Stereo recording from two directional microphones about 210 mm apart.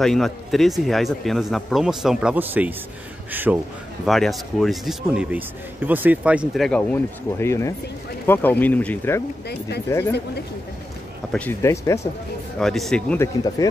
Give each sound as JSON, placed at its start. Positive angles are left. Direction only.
{"t": 0.0, "sound": "speech", "side_deg": 0}
{"t": 11.3, "sound": "speech", "side_deg": 10}
{"t": 12.5, "sound": "speech", "side_deg": 0}
{"t": 13.6, "sound": "speech", "side_deg": 15}